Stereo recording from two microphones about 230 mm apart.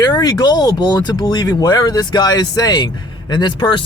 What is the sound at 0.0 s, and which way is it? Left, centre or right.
Speech, centre.